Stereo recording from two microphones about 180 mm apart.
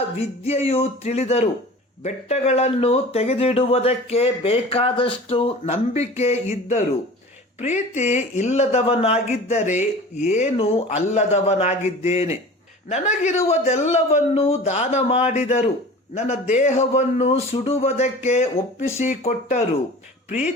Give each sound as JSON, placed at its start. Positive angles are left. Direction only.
{"t": 0.2, "sound": "speech", "side_deg": 35}